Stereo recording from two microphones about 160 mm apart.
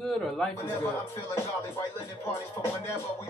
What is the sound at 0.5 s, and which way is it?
Music, 15° left (ahead or behind).